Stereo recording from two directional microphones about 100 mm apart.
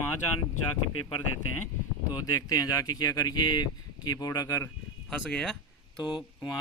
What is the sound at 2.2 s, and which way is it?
Speech, 35° left (ahead or behind).